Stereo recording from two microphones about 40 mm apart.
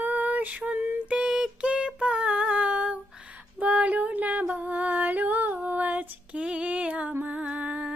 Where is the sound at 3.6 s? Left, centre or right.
Right.